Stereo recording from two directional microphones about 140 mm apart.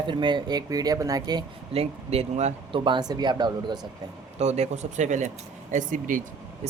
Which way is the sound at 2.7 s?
35° right (ahead or behind).